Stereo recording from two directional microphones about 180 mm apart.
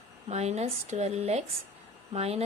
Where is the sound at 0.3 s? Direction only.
35° right (ahead or behind).